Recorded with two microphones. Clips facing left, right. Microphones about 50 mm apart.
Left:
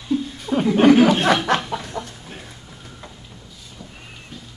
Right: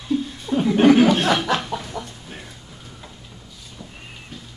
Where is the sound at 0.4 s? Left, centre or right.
Left.